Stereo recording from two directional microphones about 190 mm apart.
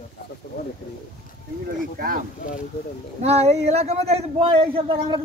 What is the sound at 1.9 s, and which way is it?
Speech, 50° right (ahead or behind).